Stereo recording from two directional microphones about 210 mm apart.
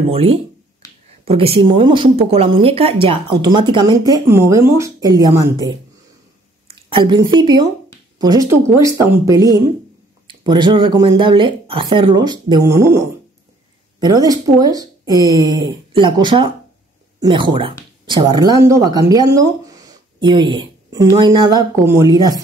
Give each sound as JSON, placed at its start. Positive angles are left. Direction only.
{"t": 0.1, "sound": "speech", "side_deg": -25}
{"t": 6.7, "sound": "a sound", "side_deg": -25}
{"t": 7.3, "sound": "speech", "side_deg": -20}